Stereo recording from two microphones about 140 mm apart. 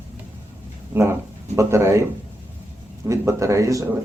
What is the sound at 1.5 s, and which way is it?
Speech, 20° right (ahead or behind).